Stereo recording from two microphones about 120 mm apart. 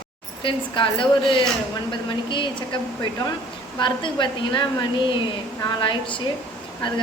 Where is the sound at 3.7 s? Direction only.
40° left (ahead or behind).